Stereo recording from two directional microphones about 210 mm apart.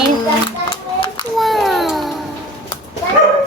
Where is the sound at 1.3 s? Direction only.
Centre (ahead or behind).